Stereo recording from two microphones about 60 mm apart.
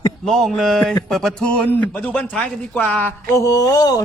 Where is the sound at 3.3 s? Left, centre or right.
Left.